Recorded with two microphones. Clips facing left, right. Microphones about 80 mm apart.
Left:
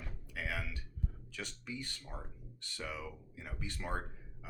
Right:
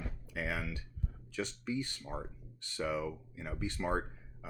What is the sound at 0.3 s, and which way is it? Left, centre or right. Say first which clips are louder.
Music: right 3 dB; right.